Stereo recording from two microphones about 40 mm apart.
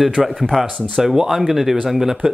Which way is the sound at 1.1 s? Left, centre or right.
Centre.